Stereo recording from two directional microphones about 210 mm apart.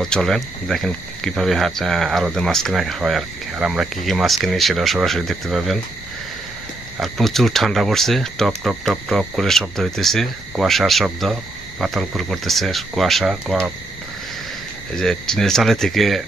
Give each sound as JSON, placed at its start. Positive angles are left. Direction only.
{"t": 0.0, "sound": "speech", "side_deg": 0}
{"t": 7.0, "sound": "speech", "side_deg": 0}
{"t": 15.0, "sound": "speech", "side_deg": 0}